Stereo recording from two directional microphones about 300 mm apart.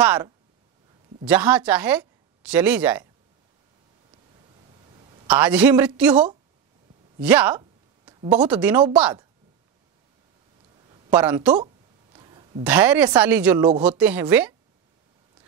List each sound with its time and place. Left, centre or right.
0.0 s a woman's voice: centre
5.2 s a woman's voice: centre
7.2 s a sound: centre
8.4 s a woman's voice: centre
10.9 s speech: centre
11.6 s a sound: centre
12.6 s a woman's voice: centre